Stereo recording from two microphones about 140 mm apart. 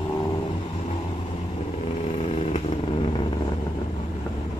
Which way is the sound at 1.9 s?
50° left (ahead or behind).